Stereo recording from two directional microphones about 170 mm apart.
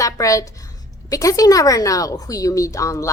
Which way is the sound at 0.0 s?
20° left (ahead or behind).